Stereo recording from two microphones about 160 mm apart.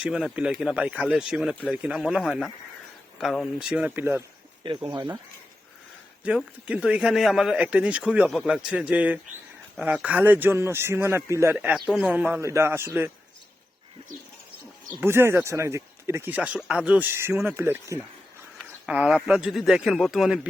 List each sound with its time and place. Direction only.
0.0 s speech: centre (ahead or behind)
4.6 s speech: 30° right (ahead or behind)
6.2 s speech: 5° right (ahead or behind)
15.0 s speech: 15° right (ahead or behind)